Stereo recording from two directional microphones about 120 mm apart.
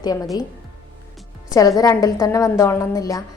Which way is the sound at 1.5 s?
30° left (ahead or behind).